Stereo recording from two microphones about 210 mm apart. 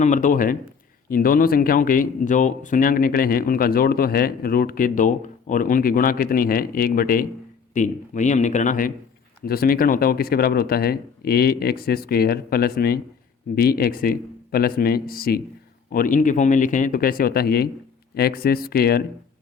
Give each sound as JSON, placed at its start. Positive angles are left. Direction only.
{"t": 0.0, "sound": "speech", "side_deg": 40}